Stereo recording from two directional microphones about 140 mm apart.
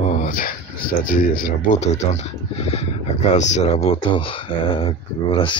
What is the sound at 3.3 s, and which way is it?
Speech, 55° left (ahead or behind).